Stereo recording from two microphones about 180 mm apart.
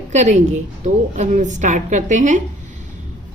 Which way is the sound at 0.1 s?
40° right (ahead or behind).